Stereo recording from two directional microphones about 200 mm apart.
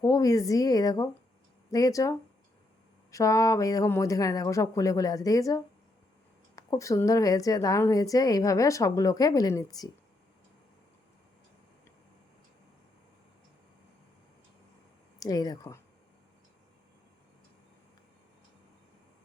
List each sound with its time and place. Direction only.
0.0 s a woman's voice: 15° left (ahead or behind)
15.2 s a woman's voice: 20° left (ahead or behind)